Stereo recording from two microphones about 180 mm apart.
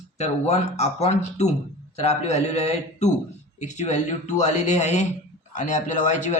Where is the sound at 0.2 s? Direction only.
40° left (ahead or behind).